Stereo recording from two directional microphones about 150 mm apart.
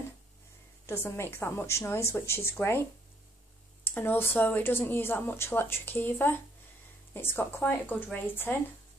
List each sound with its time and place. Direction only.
0.8 s speech: 15° left (ahead or behind)